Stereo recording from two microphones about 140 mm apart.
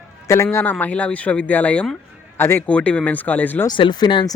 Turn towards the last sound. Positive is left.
turn(degrees=30)  # may be behind; listen again after turning